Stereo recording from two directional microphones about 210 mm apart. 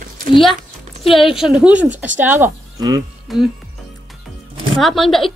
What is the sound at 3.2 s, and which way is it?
Speech, centre (ahead or behind).